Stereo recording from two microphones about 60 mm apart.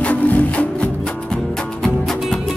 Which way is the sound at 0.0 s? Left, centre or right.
Left.